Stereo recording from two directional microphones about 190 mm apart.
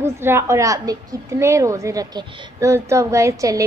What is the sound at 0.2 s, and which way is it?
A woman's voice, 15° right (ahead or behind).